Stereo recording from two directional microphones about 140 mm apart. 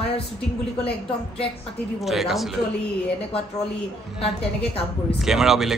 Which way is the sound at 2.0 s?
Centre (ahead or behind).